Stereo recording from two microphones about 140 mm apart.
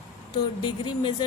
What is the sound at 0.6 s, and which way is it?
Speech, 35° left (ahead or behind).